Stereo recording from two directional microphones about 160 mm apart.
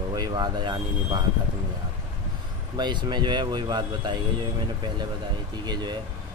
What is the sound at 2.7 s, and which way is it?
Speech, 30° right (ahead or behind).